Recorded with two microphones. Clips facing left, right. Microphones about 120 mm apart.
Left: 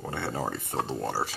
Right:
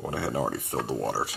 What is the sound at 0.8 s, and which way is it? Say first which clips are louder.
Speech: right 1 dB; 10° right (ahead or behind).